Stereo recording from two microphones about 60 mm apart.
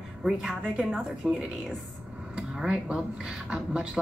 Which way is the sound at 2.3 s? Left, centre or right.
Centre.